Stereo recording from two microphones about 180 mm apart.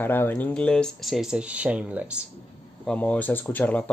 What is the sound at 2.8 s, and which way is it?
Speech, 5° left (ahead or behind).